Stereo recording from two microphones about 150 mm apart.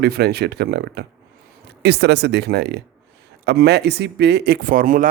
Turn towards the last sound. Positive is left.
turn(degrees=-65)  # may be behind; listen again after turning